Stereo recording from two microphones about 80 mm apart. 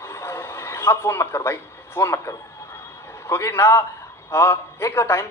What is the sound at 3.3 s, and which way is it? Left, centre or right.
A man's voice, left.